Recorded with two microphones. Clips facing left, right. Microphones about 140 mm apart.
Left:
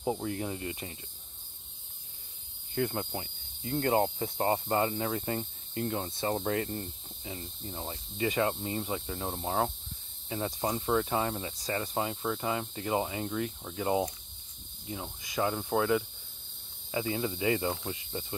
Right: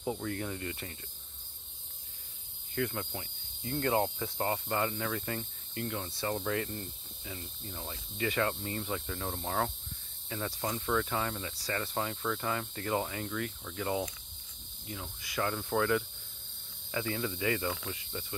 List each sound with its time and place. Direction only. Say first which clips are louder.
0.0 s cricket: left 3 dB; 25° left (ahead or behind)
2.7 s cricket: left 3 dB; 25° left (ahead or behind)